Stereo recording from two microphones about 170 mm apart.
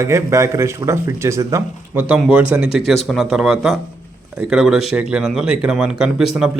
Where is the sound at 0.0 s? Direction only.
15° right (ahead or behind).